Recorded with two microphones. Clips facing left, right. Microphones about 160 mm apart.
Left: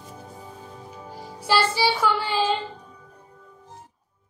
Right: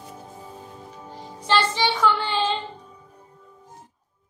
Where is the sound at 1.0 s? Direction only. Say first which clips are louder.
Even; 10° left (ahead or behind).